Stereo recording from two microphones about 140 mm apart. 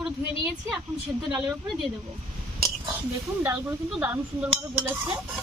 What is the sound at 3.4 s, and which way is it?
A woman's voice, 15° right (ahead or behind).